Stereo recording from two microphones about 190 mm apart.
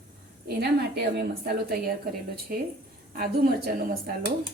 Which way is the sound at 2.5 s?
50° right (ahead or behind).